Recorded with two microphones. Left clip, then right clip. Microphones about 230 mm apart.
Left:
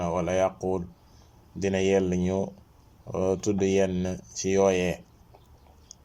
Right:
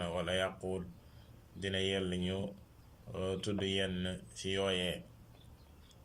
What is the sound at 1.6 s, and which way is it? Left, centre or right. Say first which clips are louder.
Speech: left 12 dB; left.